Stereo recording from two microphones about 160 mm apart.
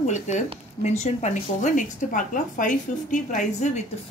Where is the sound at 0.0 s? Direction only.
45° left (ahead or behind).